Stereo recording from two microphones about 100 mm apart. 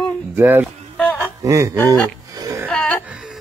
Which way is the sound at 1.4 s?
30° right (ahead or behind).